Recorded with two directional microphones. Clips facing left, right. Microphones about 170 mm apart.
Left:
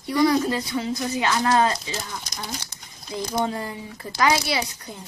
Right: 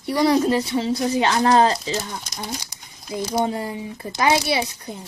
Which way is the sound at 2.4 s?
10° right (ahead or behind).